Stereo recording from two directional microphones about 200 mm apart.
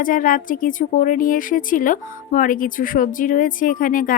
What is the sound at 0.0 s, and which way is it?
A woman's voice, 45° left (ahead or behind).